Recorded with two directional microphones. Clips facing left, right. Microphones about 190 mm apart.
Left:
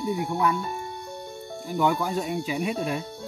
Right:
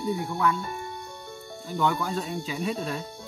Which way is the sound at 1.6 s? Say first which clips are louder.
Left 2 dB; 15° left (ahead or behind).